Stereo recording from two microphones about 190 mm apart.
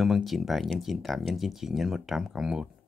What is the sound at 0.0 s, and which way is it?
Speech, centre (ahead or behind).